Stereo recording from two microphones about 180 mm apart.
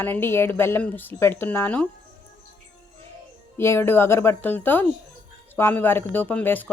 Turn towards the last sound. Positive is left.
turn(degrees=10)  # may be behind; listen again after turning